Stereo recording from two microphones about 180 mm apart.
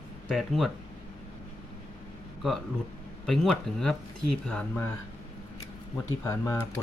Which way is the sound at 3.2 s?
5° left (ahead or behind).